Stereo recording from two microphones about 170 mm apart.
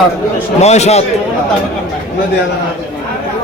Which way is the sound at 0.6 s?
40° left (ahead or behind).